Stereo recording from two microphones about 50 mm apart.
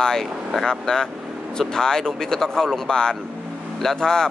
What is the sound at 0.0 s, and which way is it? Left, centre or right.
Speech, centre.